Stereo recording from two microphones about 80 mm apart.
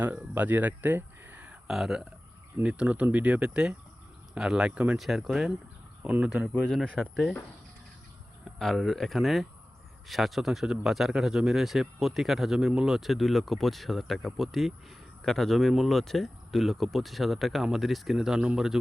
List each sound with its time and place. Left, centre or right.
0.0 s speech: right
1.6 s speech: centre
4.9 s speech: centre
6.0 s speech: centre
6.7 s speech: centre
8.5 s speech: centre